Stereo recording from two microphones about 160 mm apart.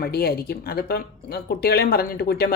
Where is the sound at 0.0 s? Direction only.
75° left (ahead or behind).